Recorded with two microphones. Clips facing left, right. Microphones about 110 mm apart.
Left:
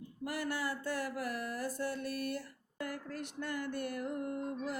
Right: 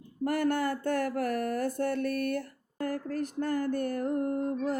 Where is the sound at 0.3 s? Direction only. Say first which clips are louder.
Right 9 dB; 50° right (ahead or behind).